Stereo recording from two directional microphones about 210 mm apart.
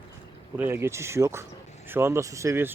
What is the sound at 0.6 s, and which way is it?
Speech, 10° right (ahead or behind).